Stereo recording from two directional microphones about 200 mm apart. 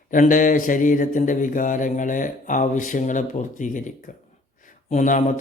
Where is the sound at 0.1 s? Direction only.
40° left (ahead or behind).